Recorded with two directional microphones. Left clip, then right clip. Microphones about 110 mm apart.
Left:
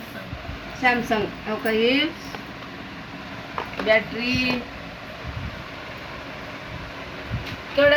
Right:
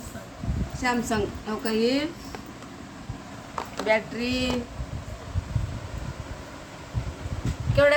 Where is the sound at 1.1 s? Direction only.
Centre (ahead or behind).